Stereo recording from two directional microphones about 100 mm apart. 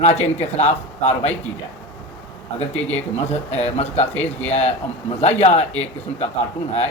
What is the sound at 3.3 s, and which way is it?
Speech, 90° left.